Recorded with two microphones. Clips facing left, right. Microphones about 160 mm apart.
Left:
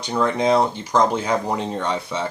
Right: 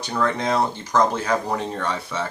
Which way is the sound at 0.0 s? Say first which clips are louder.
Left 3 dB; 15° left (ahead or behind).